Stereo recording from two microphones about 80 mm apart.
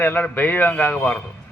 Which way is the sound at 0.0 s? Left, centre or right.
Left.